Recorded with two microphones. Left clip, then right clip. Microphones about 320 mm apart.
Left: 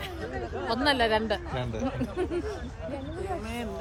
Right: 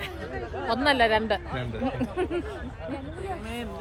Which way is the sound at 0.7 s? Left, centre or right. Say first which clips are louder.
Right 3 dB; centre.